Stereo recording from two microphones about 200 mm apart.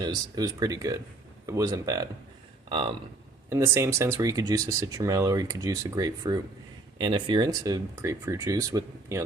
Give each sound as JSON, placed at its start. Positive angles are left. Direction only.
{"t": 0.0, "sound": "speech", "side_deg": -20}
{"t": 3.5, "sound": "speech", "side_deg": -15}